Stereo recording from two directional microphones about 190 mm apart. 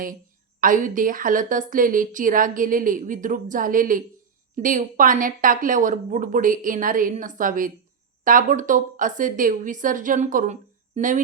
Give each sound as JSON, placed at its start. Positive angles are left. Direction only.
{"t": 0.6, "sound": "a woman's voice", "side_deg": -45}